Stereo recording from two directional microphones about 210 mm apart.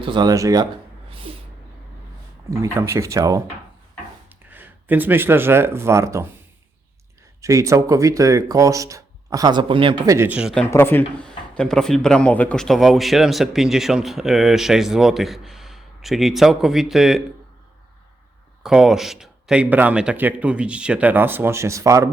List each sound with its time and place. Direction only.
0.0 s speech: 20° right (ahead or behind)
1.3 s vehicle: 25° right (ahead or behind)
2.6 s speech: 10° right (ahead or behind)
4.4 s speech: 10° right (ahead or behind)
7.4 s speech: 15° right (ahead or behind)
10.2 s speech: 5° right (ahead or behind)
10.7 s speech: 10° left (ahead or behind)
18.6 s speech: centre (ahead or behind)